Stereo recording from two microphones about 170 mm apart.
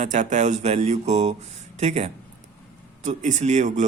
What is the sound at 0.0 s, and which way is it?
A man's voice, 45° right (ahead or behind).